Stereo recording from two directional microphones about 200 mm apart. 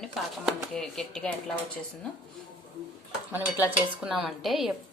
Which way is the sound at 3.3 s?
10° right (ahead or behind).